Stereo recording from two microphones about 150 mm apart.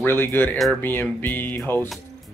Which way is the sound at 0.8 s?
15° left (ahead or behind).